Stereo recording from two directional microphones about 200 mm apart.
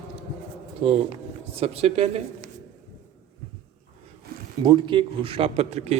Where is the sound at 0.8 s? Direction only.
30° right (ahead or behind).